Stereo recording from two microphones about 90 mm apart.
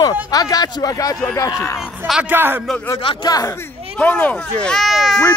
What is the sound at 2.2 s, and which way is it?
Speech, 25° right (ahead or behind).